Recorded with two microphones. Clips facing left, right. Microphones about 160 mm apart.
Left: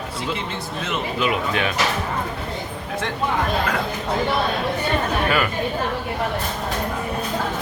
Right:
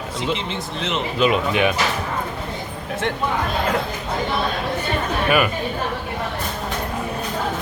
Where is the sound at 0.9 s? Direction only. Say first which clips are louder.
Right 4 dB; 20° right (ahead or behind).